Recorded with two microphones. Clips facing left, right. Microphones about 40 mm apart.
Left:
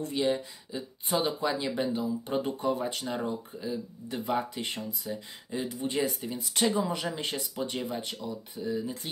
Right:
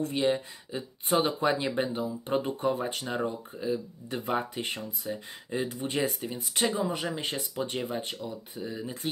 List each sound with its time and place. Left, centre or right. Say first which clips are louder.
0.1 s speech: even; right
0.7 s speech: right 4 dB; right
6.2 s speech: left 1 dB; right
7.9 s speech: right 1 dB; right